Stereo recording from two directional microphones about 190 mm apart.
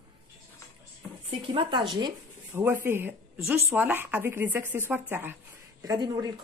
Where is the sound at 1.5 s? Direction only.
25° right (ahead or behind).